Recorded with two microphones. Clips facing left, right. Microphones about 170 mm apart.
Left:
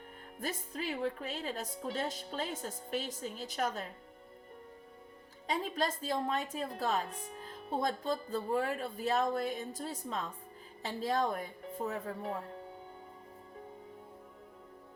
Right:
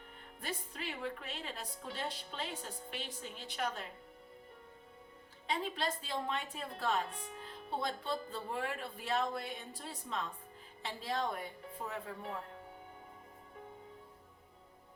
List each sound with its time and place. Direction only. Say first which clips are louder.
0.3 s speech: left 5 dB; 40° left (ahead or behind)
5.5 s speech: left 3 dB; 40° left (ahead or behind)